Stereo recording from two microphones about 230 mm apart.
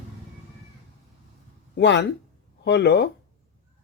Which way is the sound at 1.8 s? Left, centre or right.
Left.